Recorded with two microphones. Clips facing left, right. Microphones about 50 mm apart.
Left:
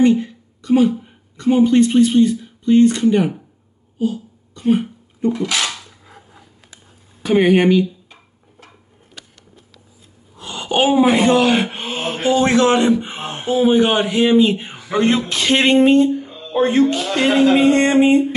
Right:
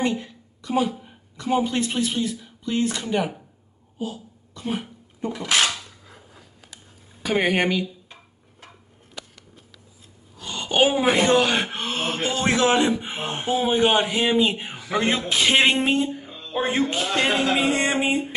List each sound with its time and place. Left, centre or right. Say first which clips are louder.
0.0 s a sound: left 11 dB; centre
2.0 s speech: left 12 dB; centre
4.0 s a sound: left 10 dB; centre
5.4 s speech: left 1 dB; right
5.7 s cap gun: left 1 dB; centre
7.2 s speech: left 8 dB; centre
10.3 s speech: left 4 dB; centre